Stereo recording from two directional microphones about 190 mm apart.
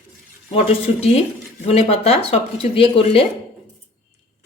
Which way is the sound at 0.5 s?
30° left (ahead or behind).